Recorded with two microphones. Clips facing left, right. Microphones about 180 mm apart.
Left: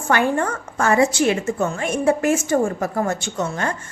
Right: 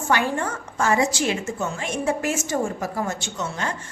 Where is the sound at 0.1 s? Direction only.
55° left (ahead or behind).